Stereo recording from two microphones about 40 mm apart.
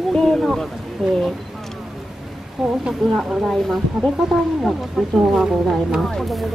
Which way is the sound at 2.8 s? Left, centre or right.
Centre.